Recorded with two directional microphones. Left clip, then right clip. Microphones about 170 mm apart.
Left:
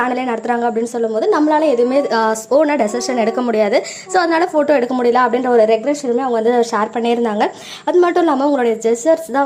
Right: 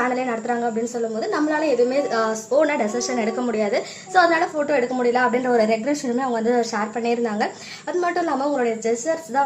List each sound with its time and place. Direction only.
0.1 s a woman's voice: 40° left (ahead or behind)